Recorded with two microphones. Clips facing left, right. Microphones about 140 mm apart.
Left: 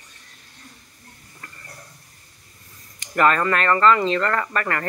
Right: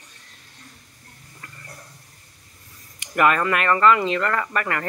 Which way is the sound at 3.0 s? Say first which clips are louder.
Left 1 dB; 10° right (ahead or behind).